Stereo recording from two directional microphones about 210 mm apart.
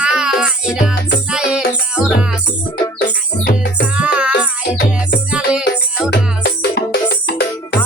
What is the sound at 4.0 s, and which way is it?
Music, 5° right (ahead or behind).